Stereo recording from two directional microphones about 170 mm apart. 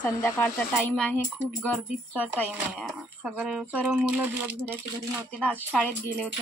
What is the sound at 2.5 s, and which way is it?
Speech, 5° right (ahead or behind).